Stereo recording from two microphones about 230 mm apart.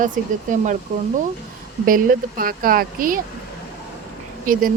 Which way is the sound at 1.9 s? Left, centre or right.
Right.